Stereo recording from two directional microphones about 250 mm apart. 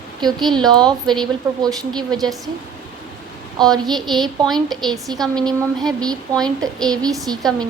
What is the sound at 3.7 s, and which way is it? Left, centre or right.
Speech, centre.